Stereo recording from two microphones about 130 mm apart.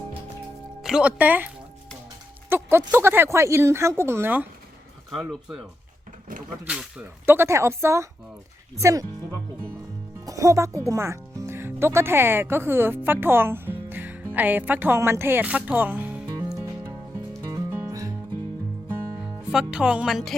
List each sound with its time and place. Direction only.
0.8 s speech: 5° right (ahead or behind)
2.5 s speech: 20° right (ahead or behind)
5.3 s speech: 5° right (ahead or behind)
6.7 s speech: 10° right (ahead or behind); by 9.0 s 25° right (ahead or behind)
10.2 s speech: 25° right (ahead or behind)
17.5 s music: 25° right (ahead or behind)
19.2 s speech: 5° right (ahead or behind)